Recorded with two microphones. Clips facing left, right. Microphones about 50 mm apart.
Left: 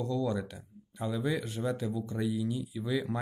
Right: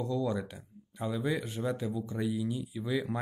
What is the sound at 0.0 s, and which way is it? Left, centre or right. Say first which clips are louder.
Speech: even; centre.